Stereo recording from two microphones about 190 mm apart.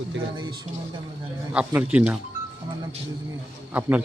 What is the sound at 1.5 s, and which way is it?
Speech, 5° right (ahead or behind).